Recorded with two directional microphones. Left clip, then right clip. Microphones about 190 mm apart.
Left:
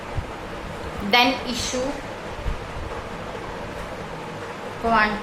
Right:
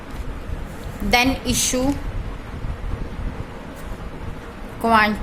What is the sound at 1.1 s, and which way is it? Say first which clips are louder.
Speech: even; 45° right (ahead or behind).